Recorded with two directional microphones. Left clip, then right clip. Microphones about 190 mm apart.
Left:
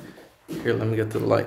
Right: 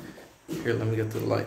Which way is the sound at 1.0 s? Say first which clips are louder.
Left 6 dB; 40° left (ahead or behind).